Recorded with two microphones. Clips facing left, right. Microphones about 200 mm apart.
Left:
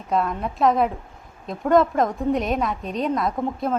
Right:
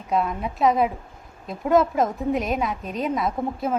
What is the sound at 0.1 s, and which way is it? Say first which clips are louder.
A woman's voice: left 1 dB; centre (ahead or behind).